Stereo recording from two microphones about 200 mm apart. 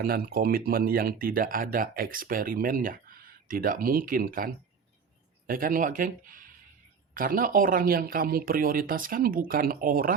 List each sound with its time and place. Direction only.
0.0 s speech: 50° right (ahead or behind)